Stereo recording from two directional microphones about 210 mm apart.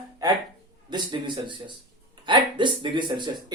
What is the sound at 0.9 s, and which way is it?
Speech, 20° right (ahead or behind).